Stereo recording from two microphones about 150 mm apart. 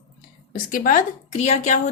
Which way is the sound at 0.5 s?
65° left (ahead or behind).